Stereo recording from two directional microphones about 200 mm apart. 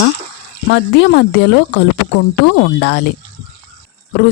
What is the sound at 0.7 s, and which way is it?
Speech, 60° left (ahead or behind).